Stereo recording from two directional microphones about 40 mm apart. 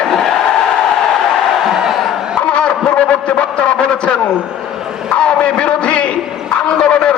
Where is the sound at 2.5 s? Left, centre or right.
Left.